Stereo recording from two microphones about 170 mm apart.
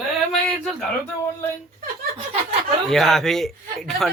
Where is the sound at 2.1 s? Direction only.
35° right (ahead or behind).